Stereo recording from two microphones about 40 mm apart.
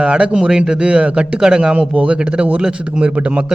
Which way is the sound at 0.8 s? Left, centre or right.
Right.